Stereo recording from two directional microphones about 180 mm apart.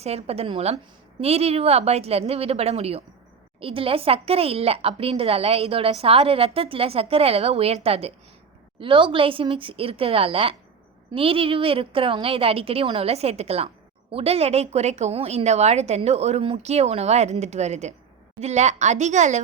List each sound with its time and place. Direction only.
0.0 s a woman's voice: 35° right (ahead or behind)